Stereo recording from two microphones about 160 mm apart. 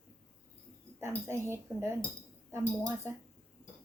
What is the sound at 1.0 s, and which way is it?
Speech, 15° right (ahead or behind).